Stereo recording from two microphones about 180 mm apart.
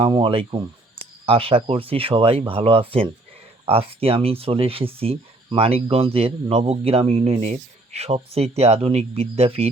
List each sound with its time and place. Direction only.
0.0 s speech: 30° right (ahead or behind)